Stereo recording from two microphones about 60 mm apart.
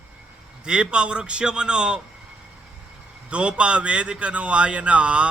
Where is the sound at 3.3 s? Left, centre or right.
Centre.